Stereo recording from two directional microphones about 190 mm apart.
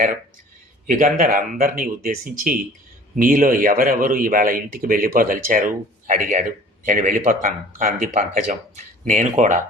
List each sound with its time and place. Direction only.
0.9 s speech: 45° right (ahead or behind)